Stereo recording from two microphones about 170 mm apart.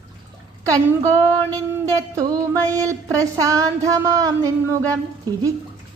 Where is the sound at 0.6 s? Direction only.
20° right (ahead or behind).